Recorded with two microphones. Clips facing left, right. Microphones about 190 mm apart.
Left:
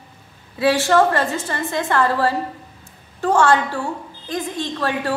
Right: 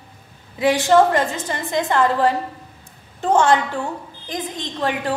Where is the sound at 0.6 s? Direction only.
15° right (ahead or behind).